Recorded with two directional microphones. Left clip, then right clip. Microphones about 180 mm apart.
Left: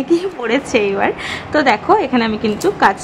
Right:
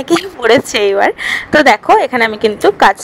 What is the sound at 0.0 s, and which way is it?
A woman's voice, 45° right (ahead or behind).